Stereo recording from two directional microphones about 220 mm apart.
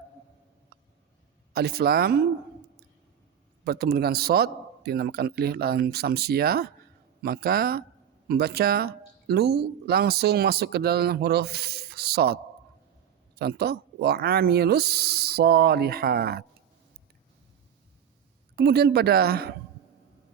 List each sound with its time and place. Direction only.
1.5 s speech: 45° right (ahead or behind)
3.6 s speech: 45° right (ahead or behind)
18.5 s speech: 45° right (ahead or behind)